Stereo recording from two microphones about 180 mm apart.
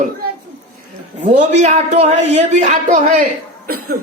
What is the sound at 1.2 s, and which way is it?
A woman's voice, 40° right (ahead or behind).